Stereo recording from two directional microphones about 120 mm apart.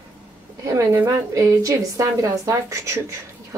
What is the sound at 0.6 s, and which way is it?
A woman's voice, 30° right (ahead or behind).